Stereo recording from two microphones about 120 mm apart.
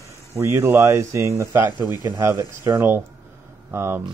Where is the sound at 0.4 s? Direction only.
20° right (ahead or behind).